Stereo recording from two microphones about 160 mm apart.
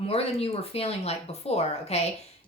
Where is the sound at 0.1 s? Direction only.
40° left (ahead or behind).